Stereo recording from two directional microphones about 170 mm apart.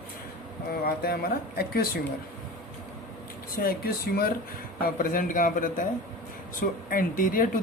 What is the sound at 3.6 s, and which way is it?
A man's voice, 60° left (ahead or behind).